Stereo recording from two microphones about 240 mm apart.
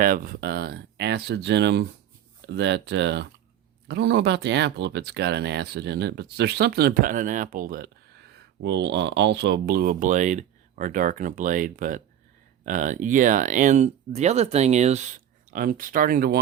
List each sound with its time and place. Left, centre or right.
0.0 s speech: right